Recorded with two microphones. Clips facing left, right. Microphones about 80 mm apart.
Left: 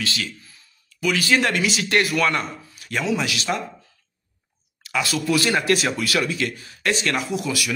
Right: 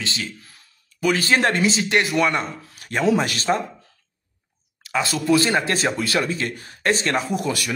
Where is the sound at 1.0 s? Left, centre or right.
Right.